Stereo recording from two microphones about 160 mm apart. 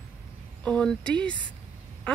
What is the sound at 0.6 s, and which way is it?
Speech, 5° left (ahead or behind).